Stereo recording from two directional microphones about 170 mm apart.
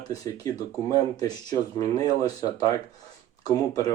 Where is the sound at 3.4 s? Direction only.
20° left (ahead or behind).